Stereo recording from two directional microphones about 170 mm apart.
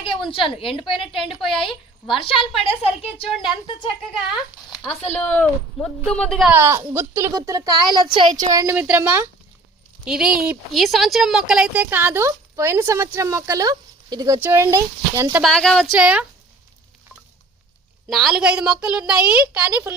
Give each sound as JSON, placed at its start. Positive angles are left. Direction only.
{"t": 0.0, "sound": "a woman's voice", "side_deg": 30}
{"t": 1.2, "sound": "a woman's voice", "side_deg": 0}
{"t": 1.5, "sound": "a woman's voice", "side_deg": 30}
{"t": 5.1, "sound": "a woman's voice", "side_deg": 10}
{"t": 6.5, "sound": "a woman's voice", "side_deg": -15}
{"t": 8.4, "sound": "a woman's voice", "side_deg": -20}
{"t": 15.4, "sound": "a woman's voice", "side_deg": 0}
{"t": 18.1, "sound": "a woman's voice", "side_deg": 0}